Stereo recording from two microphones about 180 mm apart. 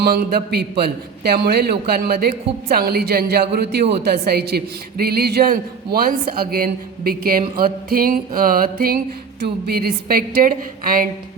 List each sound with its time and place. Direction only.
0.0 s a man's voice: 55° right (ahead or behind)